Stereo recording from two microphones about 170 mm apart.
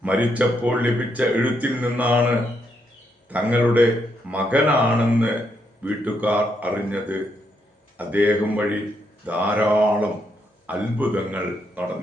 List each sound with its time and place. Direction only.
0.0 s speech: 10° right (ahead or behind)
3.2 s speech: 10° right (ahead or behind)